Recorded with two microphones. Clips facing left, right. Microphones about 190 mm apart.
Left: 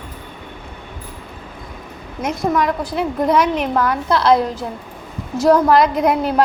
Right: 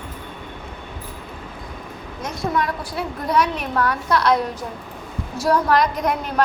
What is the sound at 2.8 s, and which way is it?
A woman's voice, 20° left (ahead or behind).